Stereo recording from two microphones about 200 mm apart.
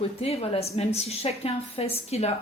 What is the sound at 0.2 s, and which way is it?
A woman's voice, 30° left (ahead or behind).